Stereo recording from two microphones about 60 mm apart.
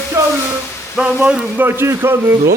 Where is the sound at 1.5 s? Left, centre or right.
Right.